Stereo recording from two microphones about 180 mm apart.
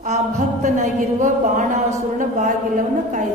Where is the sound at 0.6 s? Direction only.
45° right (ahead or behind).